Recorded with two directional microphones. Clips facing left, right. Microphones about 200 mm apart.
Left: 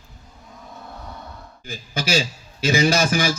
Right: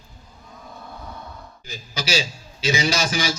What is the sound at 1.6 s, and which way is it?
A man's voice, 55° left (ahead or behind).